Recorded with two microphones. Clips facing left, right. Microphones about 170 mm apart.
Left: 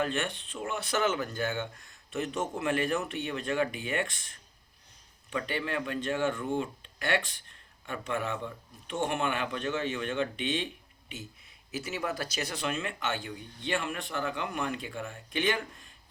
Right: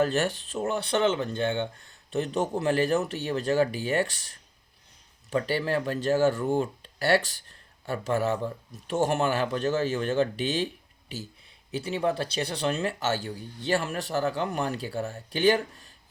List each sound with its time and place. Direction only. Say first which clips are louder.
0.0 s speech: right 6 dB; 40° right (ahead or behind)